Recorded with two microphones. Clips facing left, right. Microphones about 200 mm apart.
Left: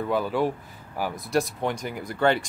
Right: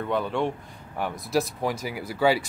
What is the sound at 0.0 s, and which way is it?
Speech, 5° left (ahead or behind).